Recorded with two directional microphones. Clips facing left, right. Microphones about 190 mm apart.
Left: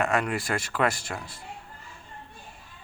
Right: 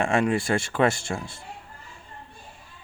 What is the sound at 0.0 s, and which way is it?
Speech, 25° right (ahead or behind).